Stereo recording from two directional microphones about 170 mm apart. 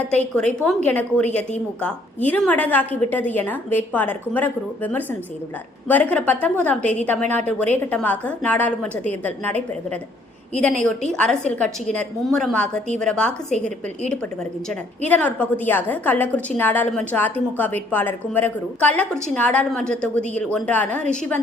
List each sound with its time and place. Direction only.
0.3 s a woman's voice: 5° left (ahead or behind)
11.1 s a woman's voice: 5° left (ahead or behind)
14.7 s a woman's voice: 10° left (ahead or behind)